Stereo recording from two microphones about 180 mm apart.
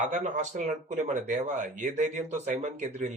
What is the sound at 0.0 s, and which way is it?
Speech, 45° right (ahead or behind).